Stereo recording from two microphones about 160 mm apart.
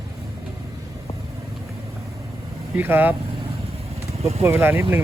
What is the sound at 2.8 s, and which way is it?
Speech, 10° right (ahead or behind).